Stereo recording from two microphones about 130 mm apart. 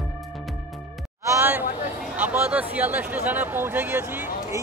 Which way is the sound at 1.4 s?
15° right (ahead or behind).